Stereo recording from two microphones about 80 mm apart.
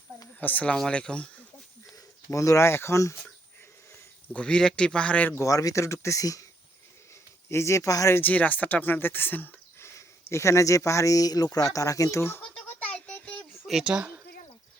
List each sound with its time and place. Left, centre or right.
0.3 s a man's voice: centre
2.3 s speech: left
4.3 s a man's voice: centre
5.3 s speech: left
7.5 s speech: left
8.1 s speech: centre
9.9 s speech: left
12.4 s a sound: centre
13.7 s speech: centre